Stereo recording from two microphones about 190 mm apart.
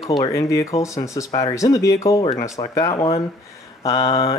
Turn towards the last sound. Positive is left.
turn(degrees=25)  # may be behind; listen again after turning